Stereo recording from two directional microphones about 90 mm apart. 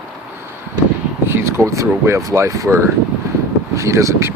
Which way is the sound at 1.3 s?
30° right (ahead or behind).